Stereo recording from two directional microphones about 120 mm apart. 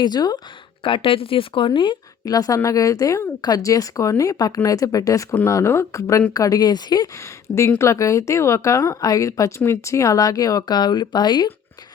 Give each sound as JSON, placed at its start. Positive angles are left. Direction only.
{"t": 0.0, "sound": "speech", "side_deg": 35}
{"t": 0.9, "sound": "speech", "side_deg": 45}
{"t": 7.4, "sound": "speech", "side_deg": 25}